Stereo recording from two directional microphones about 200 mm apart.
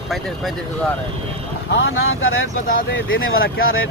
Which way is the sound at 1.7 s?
80° left.